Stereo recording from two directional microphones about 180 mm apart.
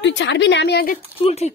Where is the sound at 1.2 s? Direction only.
35° left (ahead or behind).